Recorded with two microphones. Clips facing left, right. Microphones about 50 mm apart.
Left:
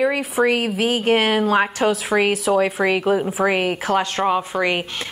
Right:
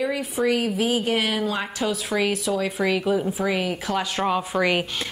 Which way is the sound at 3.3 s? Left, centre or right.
Left.